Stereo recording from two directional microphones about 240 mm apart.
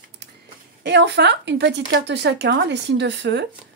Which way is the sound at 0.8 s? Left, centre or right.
Right.